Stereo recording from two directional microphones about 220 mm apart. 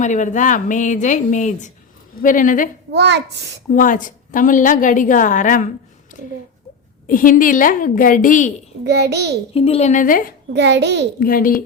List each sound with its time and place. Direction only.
0.0 s a woman's voice: 35° left (ahead or behind)
2.9 s a child's voice: 50° right (ahead or behind)
3.7 s a woman's voice: 40° left (ahead or behind)
7.1 s a woman's voice: 40° left (ahead or behind)
8.8 s a child's voice: 50° right (ahead or behind)
9.6 s a woman's voice: 30° left (ahead or behind)
10.5 s a child's voice: 50° right (ahead or behind)
11.2 s a woman's voice: 40° left (ahead or behind)